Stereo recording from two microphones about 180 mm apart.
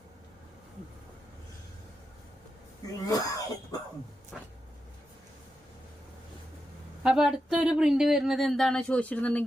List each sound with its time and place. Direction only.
2.8 s throat clearing: 20° left (ahead or behind)
4.3 s a sound: 5° left (ahead or behind)
7.0 s speech: 5° right (ahead or behind)